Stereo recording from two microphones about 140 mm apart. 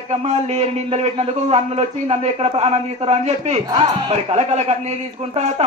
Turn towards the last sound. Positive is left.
turn(degrees=-50)  # may be behind; listen again after turning